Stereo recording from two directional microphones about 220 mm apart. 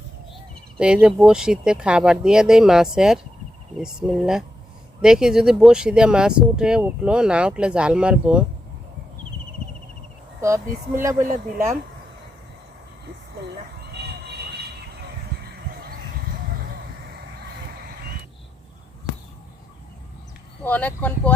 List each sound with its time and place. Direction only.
0.8 s speech: 5° right (ahead or behind)
10.4 s speech: 15° right (ahead or behind)
11.2 s speech: 35° right (ahead or behind)
13.9 s vehicle: 50° right (ahead or behind)
20.7 s speech: 5° left (ahead or behind)